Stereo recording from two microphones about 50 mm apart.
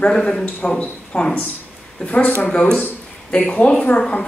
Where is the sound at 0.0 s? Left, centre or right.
Centre.